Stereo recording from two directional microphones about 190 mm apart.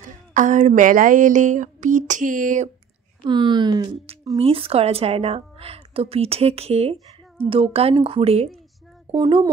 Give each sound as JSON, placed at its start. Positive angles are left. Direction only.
{"t": 0.0, "sound": "a woman's voice", "side_deg": -40}
{"t": 3.3, "sound": "a woman's voice", "side_deg": -25}